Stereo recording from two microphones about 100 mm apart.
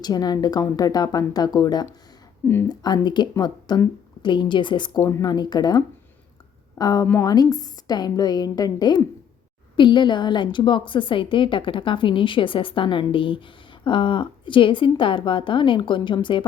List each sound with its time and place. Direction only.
0.0 s a woman's voice: 40° left (ahead or behind)